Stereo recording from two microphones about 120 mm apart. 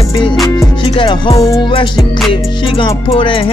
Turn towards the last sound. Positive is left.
turn(degrees=50)  # may be behind; listen again after turning